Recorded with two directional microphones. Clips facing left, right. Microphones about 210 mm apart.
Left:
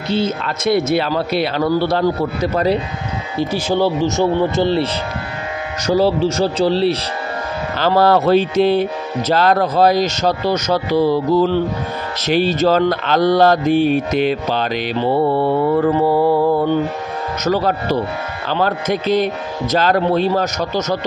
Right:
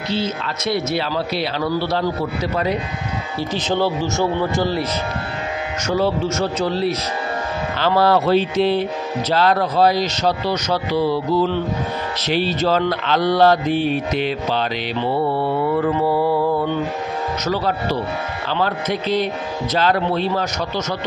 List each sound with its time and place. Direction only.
0.1 s mantra: 50° left (ahead or behind)
3.3 s speech: 10° left (ahead or behind)
5.9 s speech: 35° left (ahead or behind)
7.8 s mantra: 45° left (ahead or behind)
18.5 s mantra: 45° left (ahead or behind)